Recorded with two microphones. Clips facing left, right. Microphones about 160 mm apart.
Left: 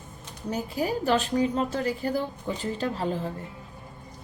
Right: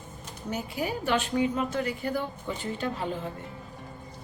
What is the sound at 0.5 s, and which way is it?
A woman's voice, 35° left (ahead or behind).